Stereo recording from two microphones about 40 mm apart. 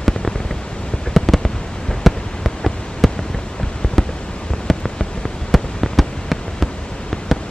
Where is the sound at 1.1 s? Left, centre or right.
Centre.